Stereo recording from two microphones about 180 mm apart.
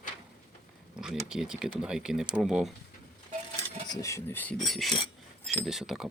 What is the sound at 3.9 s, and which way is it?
Speech, 15° left (ahead or behind).